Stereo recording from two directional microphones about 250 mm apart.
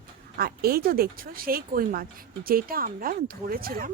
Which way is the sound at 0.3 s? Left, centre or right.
Right.